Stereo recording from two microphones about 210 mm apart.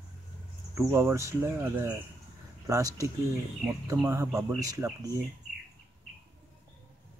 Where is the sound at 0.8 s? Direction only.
10° right (ahead or behind).